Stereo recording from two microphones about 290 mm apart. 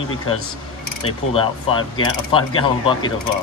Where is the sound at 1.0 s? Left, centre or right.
Centre.